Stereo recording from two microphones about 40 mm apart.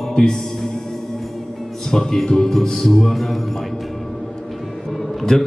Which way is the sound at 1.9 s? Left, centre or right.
Centre.